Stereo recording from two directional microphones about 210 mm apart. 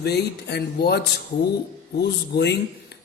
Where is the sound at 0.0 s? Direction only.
50° left (ahead or behind).